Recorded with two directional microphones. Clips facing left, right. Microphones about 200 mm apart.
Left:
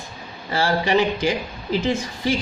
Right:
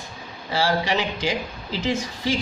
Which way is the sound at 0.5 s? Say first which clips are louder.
Left 3 dB; 50° left (ahead or behind).